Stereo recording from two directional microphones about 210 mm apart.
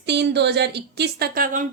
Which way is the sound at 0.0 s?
55° right (ahead or behind).